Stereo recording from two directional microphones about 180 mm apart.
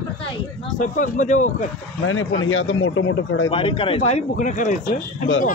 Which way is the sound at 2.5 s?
90° left.